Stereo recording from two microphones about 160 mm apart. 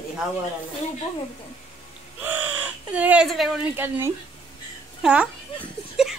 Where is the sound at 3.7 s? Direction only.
15° right (ahead or behind).